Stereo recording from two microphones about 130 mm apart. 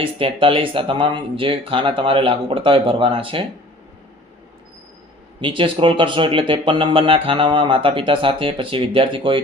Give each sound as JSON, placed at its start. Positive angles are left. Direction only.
{"t": 0.0, "sound": "speech", "side_deg": -40}
{"t": 5.4, "sound": "speech", "side_deg": -40}